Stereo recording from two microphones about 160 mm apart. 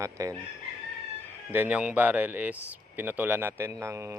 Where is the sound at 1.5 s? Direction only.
10° right (ahead or behind).